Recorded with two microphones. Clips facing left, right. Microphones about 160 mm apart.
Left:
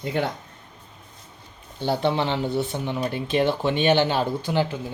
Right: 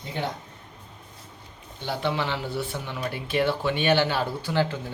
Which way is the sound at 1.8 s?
30° left (ahead or behind).